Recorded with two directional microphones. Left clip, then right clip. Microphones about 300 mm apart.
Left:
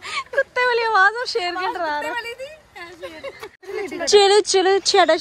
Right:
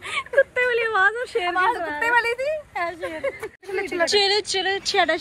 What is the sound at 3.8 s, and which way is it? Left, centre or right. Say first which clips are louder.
Speech: left 5 dB; left.